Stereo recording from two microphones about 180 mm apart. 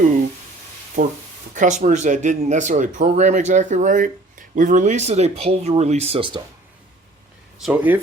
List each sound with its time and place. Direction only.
1.0 s speech: 40° right (ahead or behind)
7.6 s speech: 10° right (ahead or behind)